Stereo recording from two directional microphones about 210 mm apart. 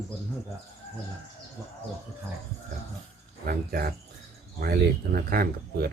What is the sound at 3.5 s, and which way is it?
Speech, 45° right (ahead or behind).